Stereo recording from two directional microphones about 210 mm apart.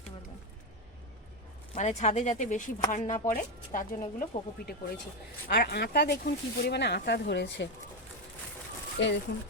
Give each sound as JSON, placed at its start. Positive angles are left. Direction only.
{"t": 1.7, "sound": "speech", "side_deg": 35}
{"t": 5.5, "sound": "speech", "side_deg": 50}
{"t": 9.0, "sound": "speech", "side_deg": 55}